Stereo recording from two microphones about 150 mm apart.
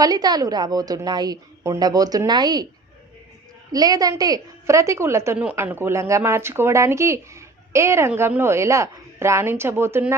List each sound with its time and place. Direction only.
0.0 s a woman's voice: 25° right (ahead or behind)
3.7 s a woman's voice: 25° right (ahead or behind)